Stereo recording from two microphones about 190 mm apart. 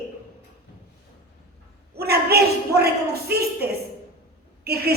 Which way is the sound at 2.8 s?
55° right (ahead or behind).